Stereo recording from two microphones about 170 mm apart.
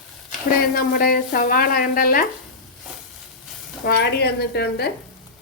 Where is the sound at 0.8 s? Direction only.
60° left (ahead or behind).